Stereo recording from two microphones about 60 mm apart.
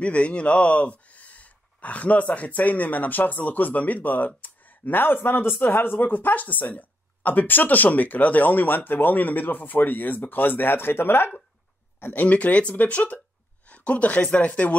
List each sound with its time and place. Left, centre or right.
0.0 s a man's voice: left
12.0 s a man's voice: left